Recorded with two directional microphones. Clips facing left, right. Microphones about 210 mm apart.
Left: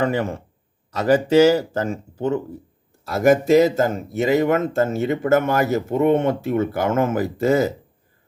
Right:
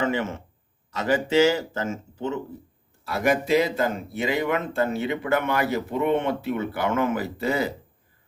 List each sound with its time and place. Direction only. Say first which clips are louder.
0.0 s speech: left 4 dB; 40° left (ahead or behind)